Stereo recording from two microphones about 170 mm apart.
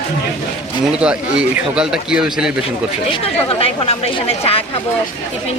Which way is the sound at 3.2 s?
35° left (ahead or behind).